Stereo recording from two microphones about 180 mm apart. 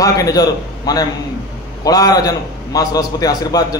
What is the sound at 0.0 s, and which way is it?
A man's voice, 20° left (ahead or behind).